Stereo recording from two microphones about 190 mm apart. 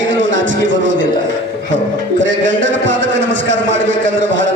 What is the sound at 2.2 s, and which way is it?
A man's voice, 80° right.